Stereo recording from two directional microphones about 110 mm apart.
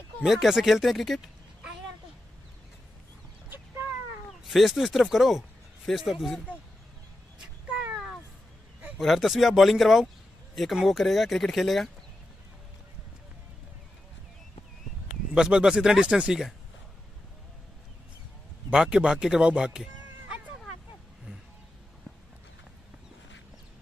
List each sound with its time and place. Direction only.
0.2 s speech: 5° right (ahead or behind)
3.4 s a sound: 20° right (ahead or behind)
4.3 s speech: centre (ahead or behind)
7.7 s cat: 5° right (ahead or behind)
8.9 s speech: centre (ahead or behind)
15.3 s speech: 5° right (ahead or behind)
18.7 s speech: 5° right (ahead or behind)